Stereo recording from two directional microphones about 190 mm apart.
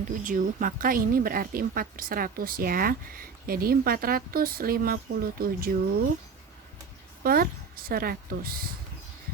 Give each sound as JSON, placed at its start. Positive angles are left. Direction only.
{"t": 0.3, "sound": "speech", "side_deg": -45}
{"t": 7.2, "sound": "speech", "side_deg": -50}